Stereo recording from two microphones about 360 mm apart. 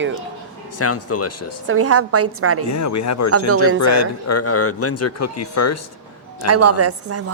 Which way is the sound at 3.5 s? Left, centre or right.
Right.